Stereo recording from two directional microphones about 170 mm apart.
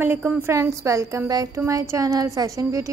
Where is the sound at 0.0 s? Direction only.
10° right (ahead or behind).